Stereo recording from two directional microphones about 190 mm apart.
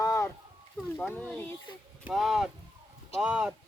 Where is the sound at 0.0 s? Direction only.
15° left (ahead or behind).